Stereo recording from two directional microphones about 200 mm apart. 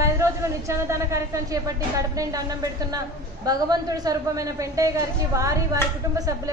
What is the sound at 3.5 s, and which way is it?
A woman's voice, 20° right (ahead or behind).